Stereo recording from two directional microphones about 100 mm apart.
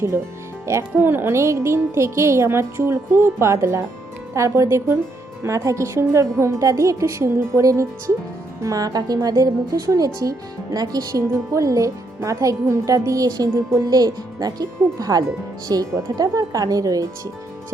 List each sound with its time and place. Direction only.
0.6 s speech: 30° right (ahead or behind)